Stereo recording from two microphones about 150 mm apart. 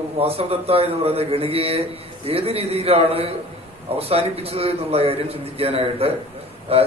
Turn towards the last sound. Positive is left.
turn(degrees=-40)  # may be behind; listen again after turning